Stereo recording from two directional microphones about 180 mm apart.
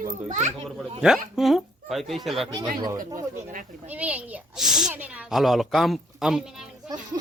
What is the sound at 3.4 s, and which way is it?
Speech, 45° right (ahead or behind).